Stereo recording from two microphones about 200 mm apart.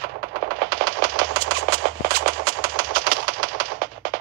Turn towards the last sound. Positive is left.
turn(degrees=-45)  # may be behind; listen again after turning